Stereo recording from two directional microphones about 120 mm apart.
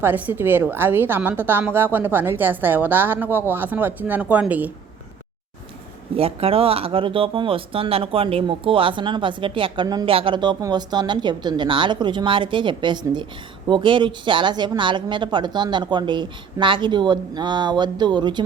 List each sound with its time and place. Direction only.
0.0 s a woman's voice: 15° right (ahead or behind)
6.1 s speech: 50° right (ahead or behind); by 10.1 s 35° right (ahead or behind)
10.1 s speech: 50° right (ahead or behind)